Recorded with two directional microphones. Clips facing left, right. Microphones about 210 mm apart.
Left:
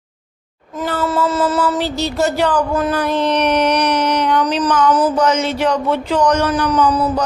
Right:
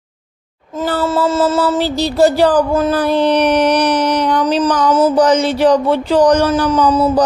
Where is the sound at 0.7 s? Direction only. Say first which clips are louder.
Right 3 dB; 30° right (ahead or behind).